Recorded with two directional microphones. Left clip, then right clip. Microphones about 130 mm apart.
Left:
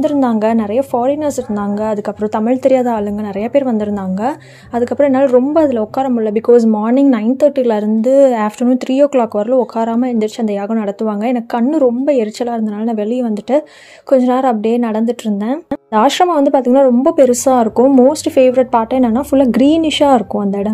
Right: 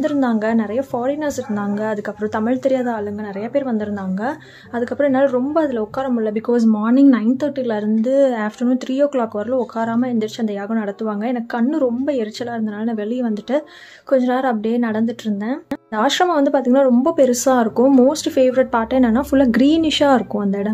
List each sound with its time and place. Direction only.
0.0 s a woman's voice: 40° left (ahead or behind)